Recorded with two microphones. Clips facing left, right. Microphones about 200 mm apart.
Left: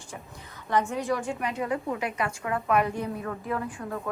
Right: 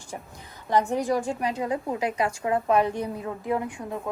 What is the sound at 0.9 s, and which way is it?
A woman's voice, 35° right (ahead or behind).